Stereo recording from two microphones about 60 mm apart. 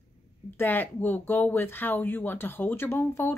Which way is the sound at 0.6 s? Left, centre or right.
Left.